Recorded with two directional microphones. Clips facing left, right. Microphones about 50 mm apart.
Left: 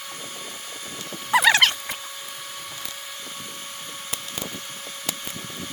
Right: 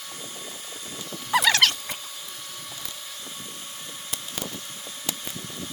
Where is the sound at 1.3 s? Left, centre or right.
Centre.